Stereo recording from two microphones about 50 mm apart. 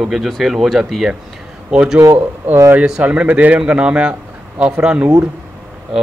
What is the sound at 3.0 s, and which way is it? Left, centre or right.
A man's voice, right.